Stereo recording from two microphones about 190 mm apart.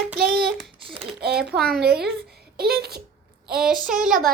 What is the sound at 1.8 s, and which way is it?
A child's voice, 55° right (ahead or behind).